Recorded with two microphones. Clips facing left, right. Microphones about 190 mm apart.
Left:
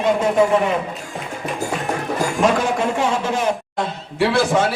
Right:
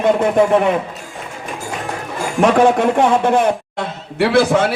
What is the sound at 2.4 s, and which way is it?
A man's voice, 65° right (ahead or behind).